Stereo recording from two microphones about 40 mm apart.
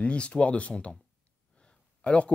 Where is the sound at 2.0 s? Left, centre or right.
Left.